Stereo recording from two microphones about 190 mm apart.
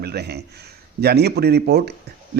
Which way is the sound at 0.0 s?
55° right (ahead or behind).